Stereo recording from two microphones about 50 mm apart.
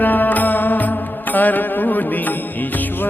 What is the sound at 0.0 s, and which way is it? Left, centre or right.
Music, left.